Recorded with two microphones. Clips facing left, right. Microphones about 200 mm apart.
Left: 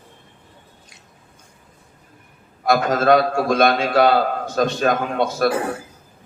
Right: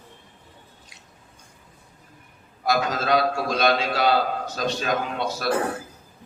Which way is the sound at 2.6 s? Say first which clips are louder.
Left 6 dB; 55° left (ahead or behind).